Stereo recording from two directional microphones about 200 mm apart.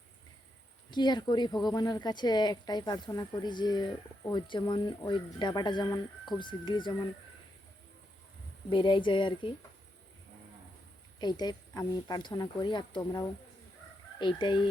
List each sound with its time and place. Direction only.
0.9 s speech: 20° left (ahead or behind)
8.7 s speech: 25° left (ahead or behind)
11.2 s speech: 20° left (ahead or behind)